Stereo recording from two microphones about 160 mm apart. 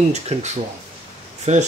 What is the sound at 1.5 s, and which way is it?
Speech, 45° right (ahead or behind).